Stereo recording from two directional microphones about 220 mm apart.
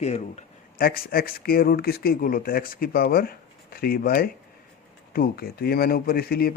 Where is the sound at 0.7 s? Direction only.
40° left (ahead or behind).